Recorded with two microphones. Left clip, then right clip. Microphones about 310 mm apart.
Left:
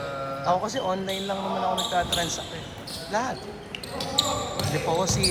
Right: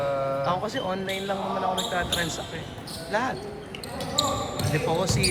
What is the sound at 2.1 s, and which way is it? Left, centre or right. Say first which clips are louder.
Speech: left 1 dB; centre.